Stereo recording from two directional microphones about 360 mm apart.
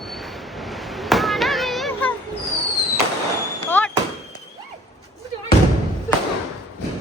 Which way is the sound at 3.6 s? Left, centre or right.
Centre.